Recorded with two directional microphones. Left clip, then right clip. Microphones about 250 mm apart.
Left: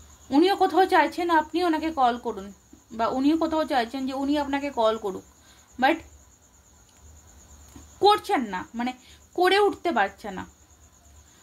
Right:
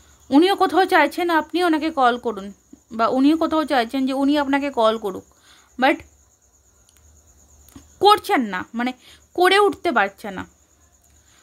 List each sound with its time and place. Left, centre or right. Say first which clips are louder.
0.3 s a woman's voice: right 4 dB; right
8.0 s a woman's voice: right 5 dB; right